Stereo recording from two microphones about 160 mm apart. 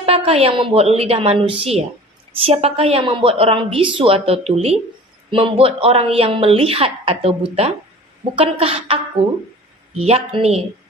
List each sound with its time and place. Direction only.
0.0 s a woman's voice: 35° right (ahead or behind)